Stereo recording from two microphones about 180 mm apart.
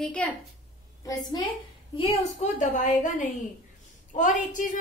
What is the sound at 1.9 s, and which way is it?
A woman's voice, 40° left (ahead or behind).